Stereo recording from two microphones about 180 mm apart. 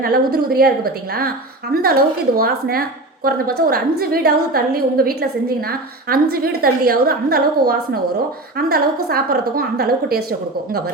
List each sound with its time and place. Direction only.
0.0 s a woman's voice: 60° right (ahead or behind)